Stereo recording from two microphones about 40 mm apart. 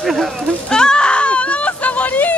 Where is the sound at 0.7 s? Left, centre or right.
Centre; by 2.3 s left.